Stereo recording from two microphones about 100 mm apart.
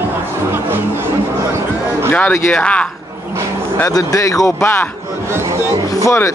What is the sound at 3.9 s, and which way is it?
Speech, 35° left (ahead or behind).